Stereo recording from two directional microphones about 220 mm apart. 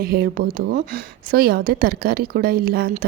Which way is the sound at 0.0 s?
45° right (ahead or behind).